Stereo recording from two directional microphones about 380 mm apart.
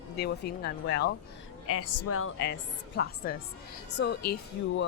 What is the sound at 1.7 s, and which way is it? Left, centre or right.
Speech, left.